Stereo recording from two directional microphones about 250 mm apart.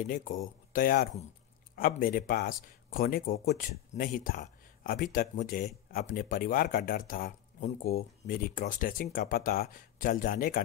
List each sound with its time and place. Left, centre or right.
0.0 s speech: left